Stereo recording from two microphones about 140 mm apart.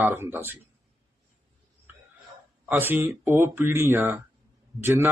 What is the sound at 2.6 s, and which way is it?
Speech, 10° right (ahead or behind).